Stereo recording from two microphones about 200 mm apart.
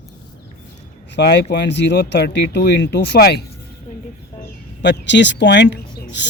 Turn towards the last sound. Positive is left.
turn(degrees=60)  # may be behind; listen again after turning